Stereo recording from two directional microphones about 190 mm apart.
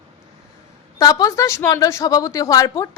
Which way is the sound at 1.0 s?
20° left (ahead or behind).